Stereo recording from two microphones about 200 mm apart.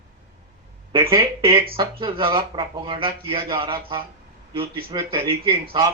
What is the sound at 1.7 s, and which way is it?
Speech, 25° right (ahead or behind).